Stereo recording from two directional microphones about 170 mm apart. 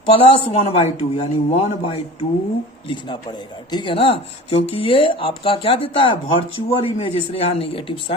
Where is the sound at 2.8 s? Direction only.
30° left (ahead or behind).